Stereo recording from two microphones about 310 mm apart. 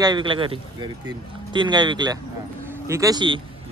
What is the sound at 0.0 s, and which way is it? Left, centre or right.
A man's voice, centre.